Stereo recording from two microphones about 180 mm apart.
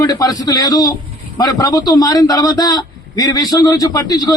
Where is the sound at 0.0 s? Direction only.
20° left (ahead or behind).